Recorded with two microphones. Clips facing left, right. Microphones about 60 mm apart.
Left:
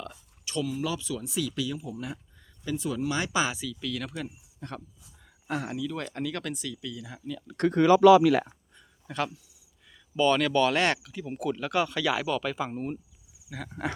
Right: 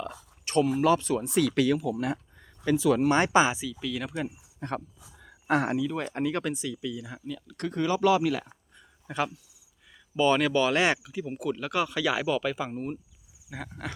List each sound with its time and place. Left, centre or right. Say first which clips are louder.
0.4 s speech: right 8 dB; right
2.6 s speech: right 8 dB; right
3.0 s speech: right 6 dB; right
3.4 s speech: right 3 dB; centre
4.6 s speech: right 7 dB; right
5.5 s speech: right 7 dB; right
5.7 s speech: right 4 dB; centre
7.7 s speech: left 7 dB; left
9.0 s speech: right 1 dB; centre
13.7 s speech: left 8 dB; centre